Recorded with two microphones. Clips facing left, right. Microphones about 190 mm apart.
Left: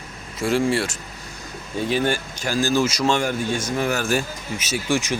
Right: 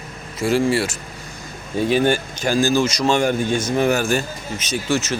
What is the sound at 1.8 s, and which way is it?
Speech, 20° right (ahead or behind).